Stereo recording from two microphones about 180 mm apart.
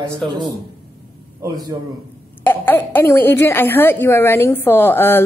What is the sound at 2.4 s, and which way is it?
A woman's voice, 10° left (ahead or behind).